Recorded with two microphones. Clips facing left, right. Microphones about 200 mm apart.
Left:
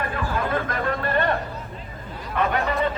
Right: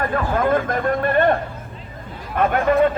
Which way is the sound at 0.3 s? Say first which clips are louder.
Right 6 dB; 50° right (ahead or behind).